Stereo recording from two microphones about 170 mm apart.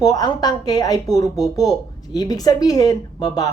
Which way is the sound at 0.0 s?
20° left (ahead or behind).